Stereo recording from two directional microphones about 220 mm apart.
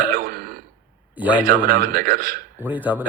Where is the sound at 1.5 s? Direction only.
40° right (ahead or behind).